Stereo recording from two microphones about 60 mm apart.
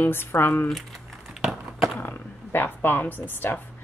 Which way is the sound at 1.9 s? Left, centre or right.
Left.